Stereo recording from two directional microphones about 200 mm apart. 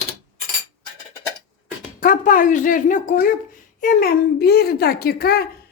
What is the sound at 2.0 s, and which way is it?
A man's voice, 40° left (ahead or behind).